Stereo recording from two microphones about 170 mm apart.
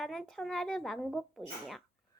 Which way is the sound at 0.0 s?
Centre (ahead or behind).